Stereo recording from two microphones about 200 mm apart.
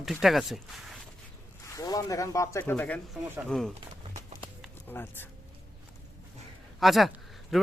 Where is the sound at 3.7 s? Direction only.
35° right (ahead or behind).